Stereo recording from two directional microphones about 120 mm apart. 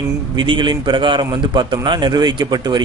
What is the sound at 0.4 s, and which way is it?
A man's voice, 45° right (ahead or behind).